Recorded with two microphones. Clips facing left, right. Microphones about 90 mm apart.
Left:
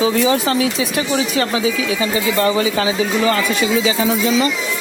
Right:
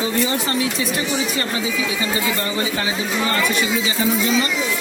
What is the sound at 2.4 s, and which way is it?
Speech, 90° left.